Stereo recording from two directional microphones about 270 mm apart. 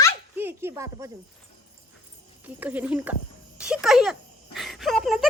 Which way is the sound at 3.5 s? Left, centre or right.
Centre.